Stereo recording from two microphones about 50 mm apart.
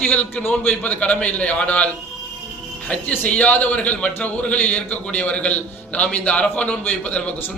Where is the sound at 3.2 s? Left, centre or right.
Left.